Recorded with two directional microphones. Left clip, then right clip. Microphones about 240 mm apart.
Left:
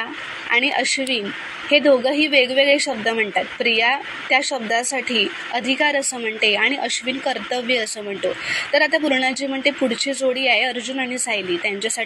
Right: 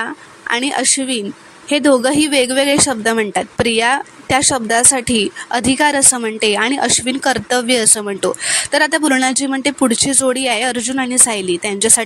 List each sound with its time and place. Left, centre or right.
0.0 s speech: right